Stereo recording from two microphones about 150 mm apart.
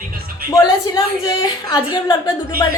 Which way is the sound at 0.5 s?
25° left (ahead or behind).